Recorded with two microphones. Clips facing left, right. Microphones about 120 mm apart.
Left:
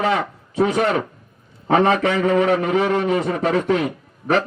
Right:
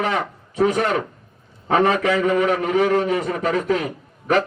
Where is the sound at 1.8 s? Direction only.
30° left (ahead or behind).